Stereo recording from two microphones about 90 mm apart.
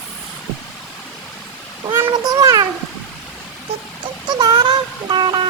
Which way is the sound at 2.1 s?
40° right (ahead or behind).